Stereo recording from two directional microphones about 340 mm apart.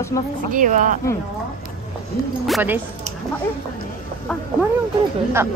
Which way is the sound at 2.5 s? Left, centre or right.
Centre.